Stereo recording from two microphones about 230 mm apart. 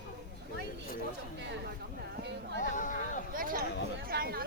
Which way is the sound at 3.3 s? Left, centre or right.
Right.